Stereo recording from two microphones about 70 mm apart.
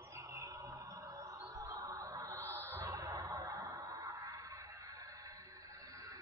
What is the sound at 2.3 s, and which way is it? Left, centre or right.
Music, right.